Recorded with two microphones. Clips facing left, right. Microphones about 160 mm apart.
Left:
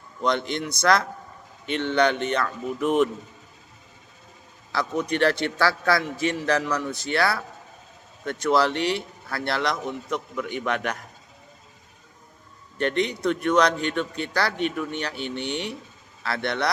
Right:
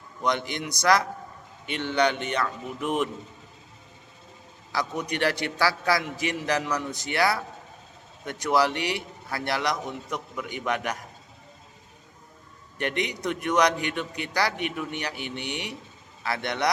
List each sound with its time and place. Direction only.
0.2 s a man's voice: 15° right (ahead or behind)
4.7 s a man's voice: 15° right (ahead or behind)
12.7 s a man's voice: 15° right (ahead or behind)